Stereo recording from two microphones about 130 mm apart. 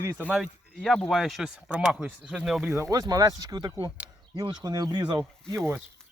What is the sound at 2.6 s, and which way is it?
Speech, 25° right (ahead or behind).